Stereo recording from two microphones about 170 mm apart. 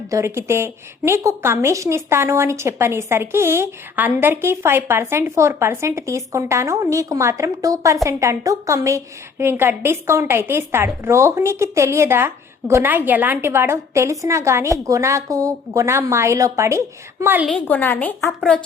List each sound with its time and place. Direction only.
0.1 s a woman's voice: 15° right (ahead or behind)
17.5 s a woman's voice: 10° left (ahead or behind)